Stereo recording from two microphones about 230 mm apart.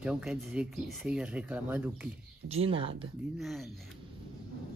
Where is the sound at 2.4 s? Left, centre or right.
Right.